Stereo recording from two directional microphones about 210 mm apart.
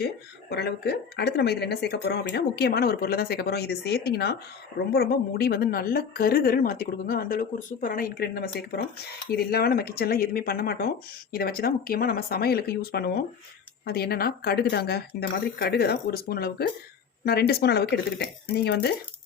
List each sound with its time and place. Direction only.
0.5 s a woman's voice: 50° left (ahead or behind)